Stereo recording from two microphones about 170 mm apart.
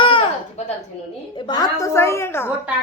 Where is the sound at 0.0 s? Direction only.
30° left (ahead or behind).